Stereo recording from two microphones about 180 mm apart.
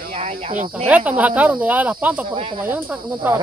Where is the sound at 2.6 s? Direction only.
10° right (ahead or behind).